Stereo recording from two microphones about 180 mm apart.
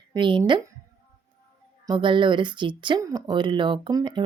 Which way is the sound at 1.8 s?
25° right (ahead or behind).